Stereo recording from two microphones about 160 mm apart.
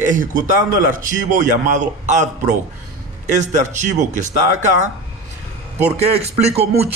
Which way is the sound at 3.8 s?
50° right (ahead or behind).